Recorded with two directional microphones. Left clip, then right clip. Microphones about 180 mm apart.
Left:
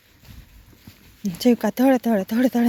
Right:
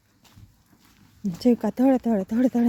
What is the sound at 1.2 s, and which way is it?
Speech, 10° right (ahead or behind).